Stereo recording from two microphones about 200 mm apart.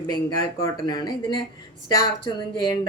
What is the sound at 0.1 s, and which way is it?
Speech, 20° left (ahead or behind).